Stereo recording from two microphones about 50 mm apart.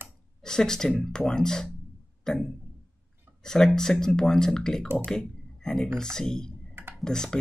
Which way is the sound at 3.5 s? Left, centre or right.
Centre.